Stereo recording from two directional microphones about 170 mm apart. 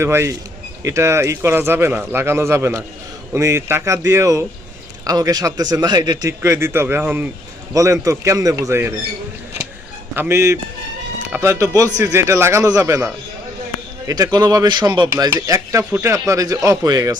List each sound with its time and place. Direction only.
0.0 s a man's voice: 15° right (ahead or behind)
10.2 s speech: 15° right (ahead or behind)
14.1 s a man's voice: 20° right (ahead or behind)